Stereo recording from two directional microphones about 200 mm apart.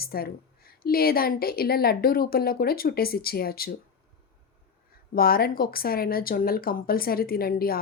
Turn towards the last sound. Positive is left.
turn(degrees=50)  # may be behind; listen again after turning